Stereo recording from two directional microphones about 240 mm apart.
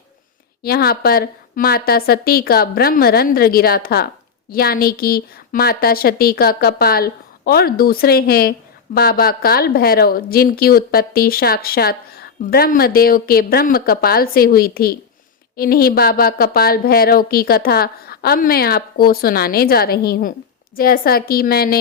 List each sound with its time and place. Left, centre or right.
0.6 s a woman's voice: left